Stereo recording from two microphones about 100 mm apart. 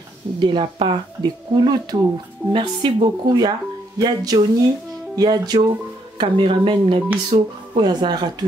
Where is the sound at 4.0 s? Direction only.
40° right (ahead or behind).